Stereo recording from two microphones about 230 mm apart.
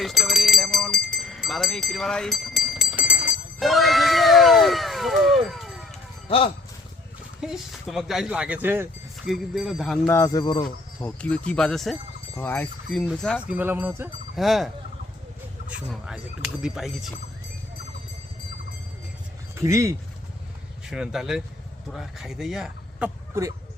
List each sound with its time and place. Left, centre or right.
0.0 s a sound: centre
6.2 s speech: left
7.4 s speech: centre
10.2 s speech: centre
10.6 s speech: centre
13.6 s cowbell: centre
15.7 s speech: centre
19.5 s speech: centre
20.9 s speech: centre